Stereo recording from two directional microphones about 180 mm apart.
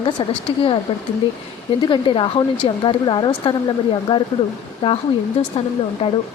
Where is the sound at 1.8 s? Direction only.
30° left (ahead or behind).